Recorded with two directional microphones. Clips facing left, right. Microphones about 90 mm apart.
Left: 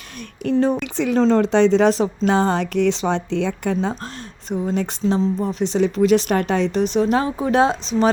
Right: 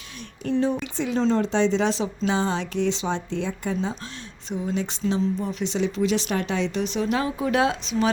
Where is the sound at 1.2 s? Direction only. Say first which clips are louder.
Left 6 dB; 80° left; by 4.0 s 65° left (ahead or behind).